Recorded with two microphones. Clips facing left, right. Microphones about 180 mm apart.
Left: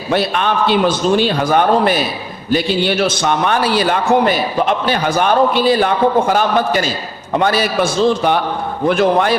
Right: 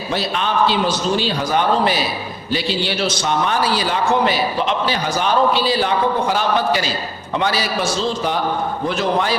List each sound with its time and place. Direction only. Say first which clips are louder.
0.1 s a man's voice: left 5 dB; 60° left (ahead or behind)